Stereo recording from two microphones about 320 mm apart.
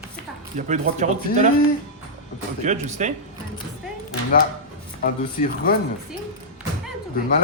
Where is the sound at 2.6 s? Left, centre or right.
Right.